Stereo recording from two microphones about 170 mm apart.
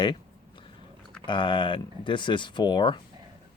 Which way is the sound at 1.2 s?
30° left (ahead or behind).